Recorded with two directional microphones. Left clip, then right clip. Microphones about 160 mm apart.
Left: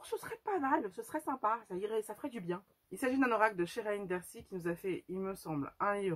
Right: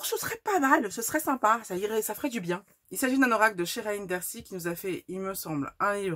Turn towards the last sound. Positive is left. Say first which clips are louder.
# right 6 dB
turn(degrees=-30)  # may be behind; listen again after turning